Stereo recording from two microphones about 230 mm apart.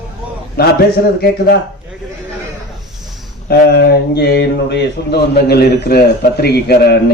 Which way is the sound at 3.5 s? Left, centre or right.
Left.